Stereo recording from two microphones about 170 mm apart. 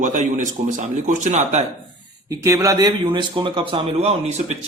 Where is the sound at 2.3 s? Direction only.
20° right (ahead or behind).